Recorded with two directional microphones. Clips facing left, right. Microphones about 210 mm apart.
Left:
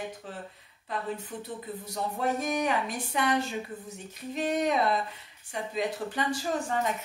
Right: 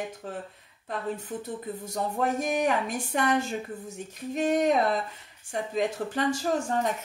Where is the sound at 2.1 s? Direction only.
45° right (ahead or behind).